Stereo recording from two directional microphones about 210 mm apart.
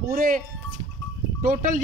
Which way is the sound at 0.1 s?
45° right (ahead or behind).